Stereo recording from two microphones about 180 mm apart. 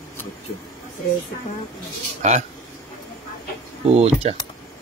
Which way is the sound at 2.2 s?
40° right (ahead or behind).